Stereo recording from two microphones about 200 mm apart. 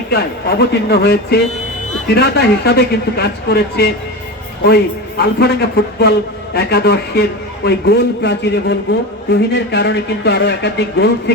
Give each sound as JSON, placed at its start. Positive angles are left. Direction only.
{"t": 0.1, "sound": "a man's voice", "side_deg": 55}